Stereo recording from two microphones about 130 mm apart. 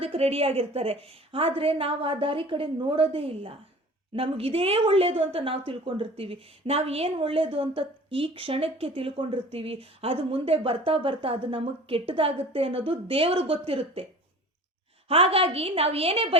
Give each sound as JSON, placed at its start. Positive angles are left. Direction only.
{"t": 0.0, "sound": "speech", "side_deg": -50}
{"t": 15.0, "sound": "speech", "side_deg": -50}